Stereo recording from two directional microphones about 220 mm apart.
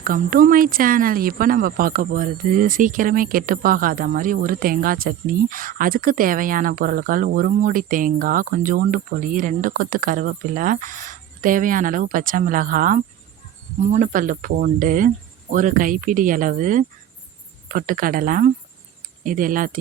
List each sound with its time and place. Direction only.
0.0 s speech: 40° right (ahead or behind)